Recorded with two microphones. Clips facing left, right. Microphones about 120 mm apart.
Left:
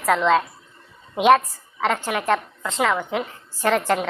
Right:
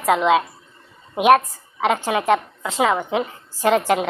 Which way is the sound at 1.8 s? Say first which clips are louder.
Right 3 dB; 15° right (ahead or behind).